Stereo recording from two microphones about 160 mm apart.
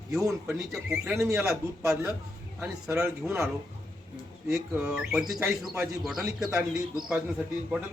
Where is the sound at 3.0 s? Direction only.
15° right (ahead or behind).